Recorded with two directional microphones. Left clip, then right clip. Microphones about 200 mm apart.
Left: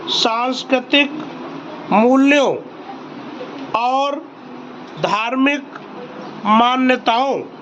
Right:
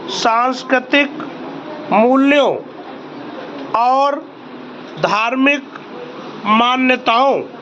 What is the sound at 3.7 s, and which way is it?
A man's voice, 10° left (ahead or behind).